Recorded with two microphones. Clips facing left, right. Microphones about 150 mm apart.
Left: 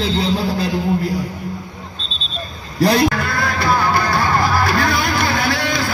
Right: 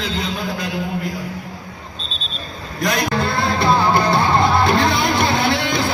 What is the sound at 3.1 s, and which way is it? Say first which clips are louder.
Music: right 2 dB; 25° right (ahead or behind).